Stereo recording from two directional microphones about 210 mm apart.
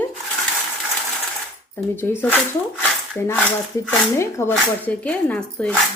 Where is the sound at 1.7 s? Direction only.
10° left (ahead or behind).